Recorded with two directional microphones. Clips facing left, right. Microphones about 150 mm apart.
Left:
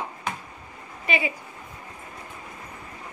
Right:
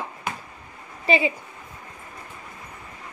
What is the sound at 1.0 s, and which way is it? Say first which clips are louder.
Speech: right 5 dB; 30° right (ahead or behind).